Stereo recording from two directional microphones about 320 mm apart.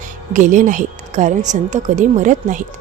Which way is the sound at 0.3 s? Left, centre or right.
Right.